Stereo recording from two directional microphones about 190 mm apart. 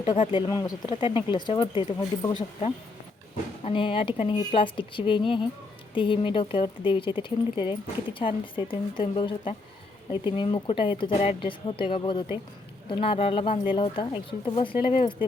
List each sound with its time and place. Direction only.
0.3 s speech: 20° left (ahead or behind)
3.6 s speech: 30° left (ahead or behind)